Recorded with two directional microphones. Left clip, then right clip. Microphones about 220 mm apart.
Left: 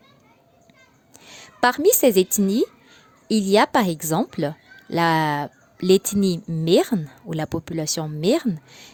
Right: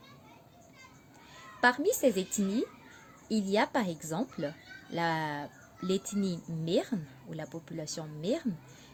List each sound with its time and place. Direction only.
1.3 s speech: 45° left (ahead or behind)